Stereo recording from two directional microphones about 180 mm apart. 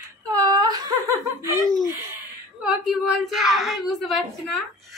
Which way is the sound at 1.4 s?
15° right (ahead or behind).